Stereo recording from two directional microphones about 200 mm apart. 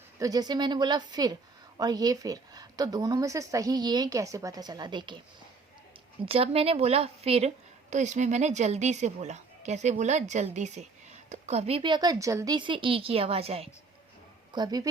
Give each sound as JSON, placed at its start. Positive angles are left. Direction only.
{"t": 0.2, "sound": "speech", "side_deg": -20}
{"t": 6.2, "sound": "a woman's voice", "side_deg": -30}
{"t": 14.5, "sound": "speech", "side_deg": -20}